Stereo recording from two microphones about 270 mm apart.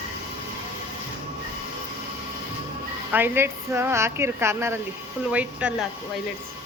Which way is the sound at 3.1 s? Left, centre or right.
Centre.